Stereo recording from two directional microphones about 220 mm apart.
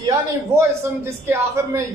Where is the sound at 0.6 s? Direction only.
10° right (ahead or behind).